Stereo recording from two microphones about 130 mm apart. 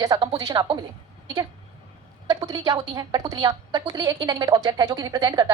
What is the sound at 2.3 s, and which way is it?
A woman's voice, 30° right (ahead or behind).